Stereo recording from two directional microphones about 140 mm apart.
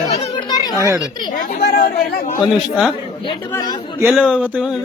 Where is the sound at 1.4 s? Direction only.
80° left.